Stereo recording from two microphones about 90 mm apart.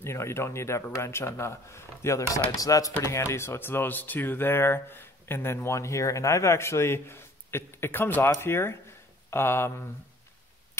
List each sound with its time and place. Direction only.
0.0 s speech: 30° left (ahead or behind)